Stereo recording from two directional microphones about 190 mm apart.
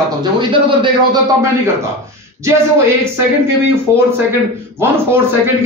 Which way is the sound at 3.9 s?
15° right (ahead or behind).